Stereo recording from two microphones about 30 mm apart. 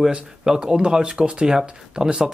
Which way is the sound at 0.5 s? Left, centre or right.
Centre.